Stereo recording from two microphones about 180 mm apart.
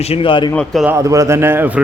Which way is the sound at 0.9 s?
15° right (ahead or behind).